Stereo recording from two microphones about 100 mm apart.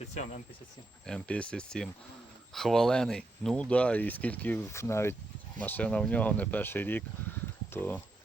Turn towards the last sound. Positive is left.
turn(degrees=20)  # may be behind; listen again after turning